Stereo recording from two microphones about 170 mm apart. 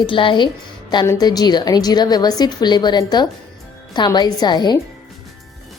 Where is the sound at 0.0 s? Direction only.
30° left (ahead or behind).